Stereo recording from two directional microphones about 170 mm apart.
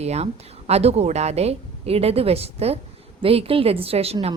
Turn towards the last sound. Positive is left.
turn(degrees=-35)  # may be behind; listen again after turning